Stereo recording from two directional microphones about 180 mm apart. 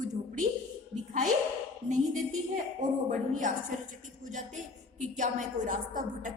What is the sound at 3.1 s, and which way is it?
A woman's voice, 45° right (ahead or behind).